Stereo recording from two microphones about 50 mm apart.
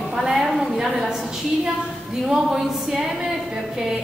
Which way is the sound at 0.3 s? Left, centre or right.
Centre.